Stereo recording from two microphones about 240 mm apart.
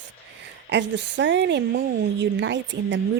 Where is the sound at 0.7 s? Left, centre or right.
Right.